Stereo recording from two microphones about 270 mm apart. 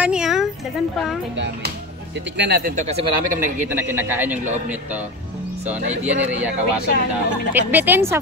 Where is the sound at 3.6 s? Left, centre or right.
Centre.